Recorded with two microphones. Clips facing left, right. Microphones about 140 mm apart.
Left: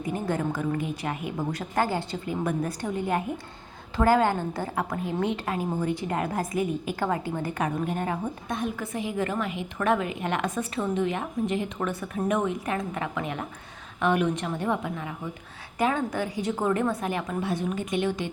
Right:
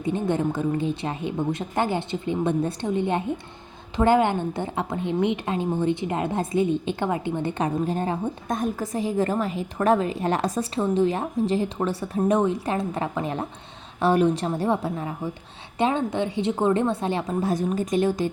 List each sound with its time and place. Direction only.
0.0 s a woman's voice: 25° right (ahead or behind)
8.4 s a woman's voice: 45° right (ahead or behind)
15.8 s a woman's voice: 25° right (ahead or behind)